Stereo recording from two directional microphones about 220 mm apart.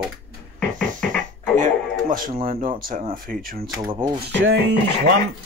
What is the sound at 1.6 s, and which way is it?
Speech, 40° right (ahead or behind).